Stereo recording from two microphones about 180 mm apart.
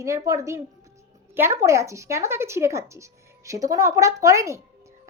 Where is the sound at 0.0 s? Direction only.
15° right (ahead or behind).